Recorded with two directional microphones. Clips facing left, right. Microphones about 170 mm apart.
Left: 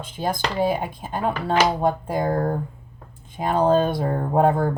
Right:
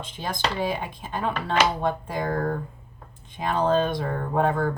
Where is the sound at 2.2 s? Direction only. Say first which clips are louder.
Left 3 dB; 25° left (ahead or behind).